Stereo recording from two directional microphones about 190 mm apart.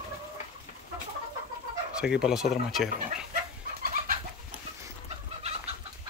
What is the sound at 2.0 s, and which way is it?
Speech, 5° right (ahead or behind).